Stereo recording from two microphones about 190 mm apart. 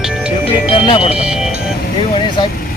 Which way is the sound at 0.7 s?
25° left (ahead or behind).